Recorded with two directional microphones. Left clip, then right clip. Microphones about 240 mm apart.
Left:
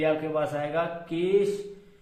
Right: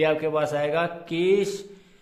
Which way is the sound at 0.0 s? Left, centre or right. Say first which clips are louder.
Right 3 dB; right.